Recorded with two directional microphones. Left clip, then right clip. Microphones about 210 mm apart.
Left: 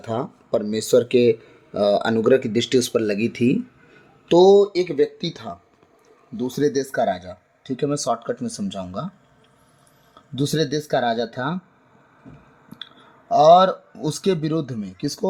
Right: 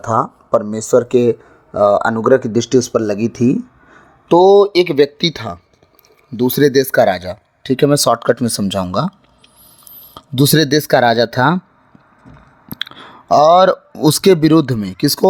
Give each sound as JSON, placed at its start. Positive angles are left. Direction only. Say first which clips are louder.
{"t": 0.0, "sound": "speech", "louder": "right 11 dB", "side_deg": -20}
{"t": 10.2, "sound": "speech", "louder": "right 9 dB", "side_deg": -40}
{"t": 12.7, "sound": "speech", "louder": "right 14 dB", "side_deg": -45}